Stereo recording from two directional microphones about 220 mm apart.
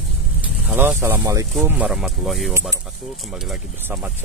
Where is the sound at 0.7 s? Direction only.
10° right (ahead or behind).